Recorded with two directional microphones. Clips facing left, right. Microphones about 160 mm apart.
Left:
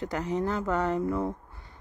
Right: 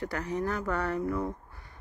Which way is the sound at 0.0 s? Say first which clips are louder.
Left 2 dB; 20° left (ahead or behind).